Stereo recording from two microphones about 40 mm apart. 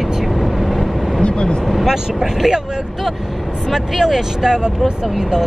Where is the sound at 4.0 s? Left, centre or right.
Centre.